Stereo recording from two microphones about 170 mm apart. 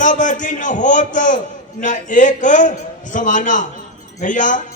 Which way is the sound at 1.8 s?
50° left (ahead or behind).